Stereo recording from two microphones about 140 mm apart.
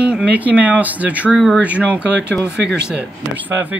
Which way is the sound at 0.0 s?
10° right (ahead or behind).